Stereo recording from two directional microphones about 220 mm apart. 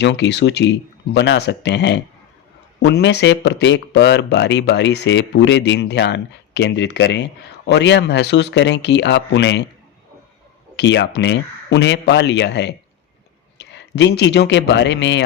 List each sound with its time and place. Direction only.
0.0 s speech: 55° left (ahead or behind)
10.8 s speech: 50° left (ahead or behind)